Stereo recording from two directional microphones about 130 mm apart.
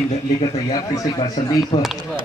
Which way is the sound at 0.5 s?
30° left (ahead or behind).